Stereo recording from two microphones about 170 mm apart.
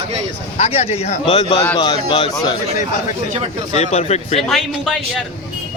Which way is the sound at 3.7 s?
40° left (ahead or behind).